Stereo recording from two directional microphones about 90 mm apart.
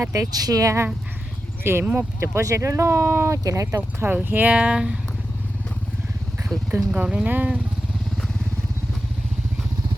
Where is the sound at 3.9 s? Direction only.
25° right (ahead or behind).